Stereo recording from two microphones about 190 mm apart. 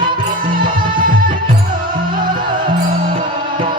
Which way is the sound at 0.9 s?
45° right (ahead or behind).